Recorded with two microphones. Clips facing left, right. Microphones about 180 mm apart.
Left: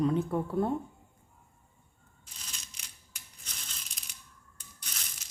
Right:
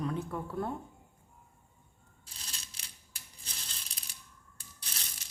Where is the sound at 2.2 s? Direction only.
35° right (ahead or behind).